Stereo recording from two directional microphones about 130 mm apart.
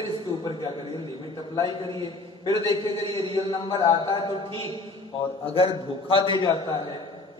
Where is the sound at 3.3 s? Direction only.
35° left (ahead or behind).